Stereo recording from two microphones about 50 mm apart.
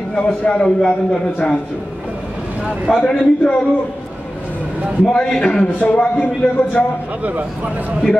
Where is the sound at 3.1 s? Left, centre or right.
Centre.